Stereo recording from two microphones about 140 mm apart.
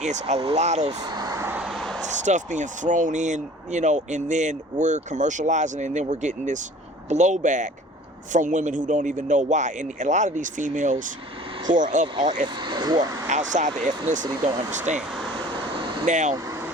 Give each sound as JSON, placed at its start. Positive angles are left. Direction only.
{"t": 0.0, "sound": "speech", "side_deg": -55}
{"t": 0.9, "sound": "vehicle", "side_deg": -30}
{"t": 1.6, "sound": "a sound", "side_deg": 0}
{"t": 2.0, "sound": "speech", "side_deg": -60}
{"t": 12.1, "sound": "speech", "side_deg": -35}
{"t": 13.3, "sound": "speech", "side_deg": -60}
{"t": 14.9, "sound": "speech", "side_deg": 0}
{"t": 16.0, "sound": "speech", "side_deg": -60}
{"t": 16.3, "sound": "vehicle", "side_deg": -20}